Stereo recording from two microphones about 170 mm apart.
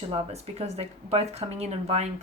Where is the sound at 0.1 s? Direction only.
35° right (ahead or behind).